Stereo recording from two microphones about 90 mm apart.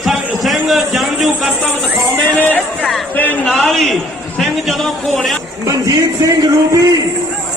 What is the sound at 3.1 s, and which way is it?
Speech, 20° left (ahead or behind).